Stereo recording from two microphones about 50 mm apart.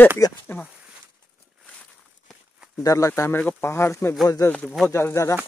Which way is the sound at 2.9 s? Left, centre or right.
Left.